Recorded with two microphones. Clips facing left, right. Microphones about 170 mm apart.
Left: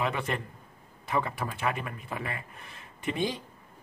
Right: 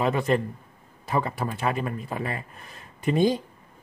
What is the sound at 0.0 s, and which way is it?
Speech, 35° right (ahead or behind).